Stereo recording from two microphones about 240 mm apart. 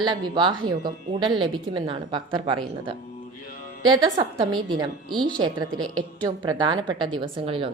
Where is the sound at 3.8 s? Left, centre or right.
Centre.